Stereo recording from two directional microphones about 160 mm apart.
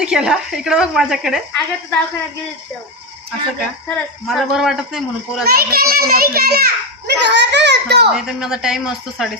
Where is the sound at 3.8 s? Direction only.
Centre (ahead or behind).